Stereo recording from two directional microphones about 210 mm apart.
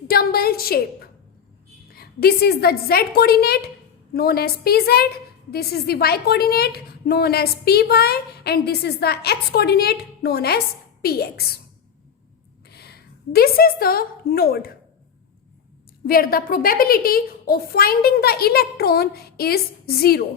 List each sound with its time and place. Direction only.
0.1 s a sound: 45° left (ahead or behind)
1.9 s a woman's voice: 45° left (ahead or behind)
12.6 s a woman's voice: 50° left (ahead or behind)
16.0 s a woman's voice: 45° left (ahead or behind)